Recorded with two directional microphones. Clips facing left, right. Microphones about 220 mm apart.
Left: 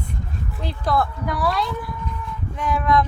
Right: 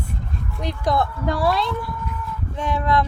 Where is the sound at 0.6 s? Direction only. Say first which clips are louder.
Right 1 dB; 20° right (ahead or behind).